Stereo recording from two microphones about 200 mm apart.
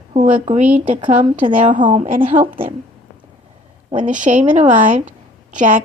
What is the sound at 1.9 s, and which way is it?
Speech, 40° right (ahead or behind).